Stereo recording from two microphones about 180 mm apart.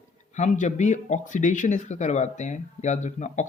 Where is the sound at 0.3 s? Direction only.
40° left (ahead or behind).